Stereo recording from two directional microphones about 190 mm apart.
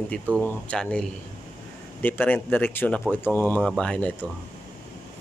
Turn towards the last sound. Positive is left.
turn(degrees=5)  # may be behind; listen again after turning